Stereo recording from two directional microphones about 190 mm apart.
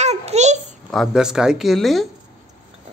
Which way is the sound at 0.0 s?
35° right (ahead or behind).